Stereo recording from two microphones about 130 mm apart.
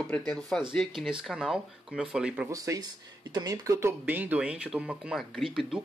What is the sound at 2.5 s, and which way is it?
Speech, 25° right (ahead or behind).